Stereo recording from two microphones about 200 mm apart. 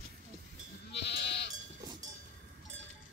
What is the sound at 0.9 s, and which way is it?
Goat, 60° left (ahead or behind).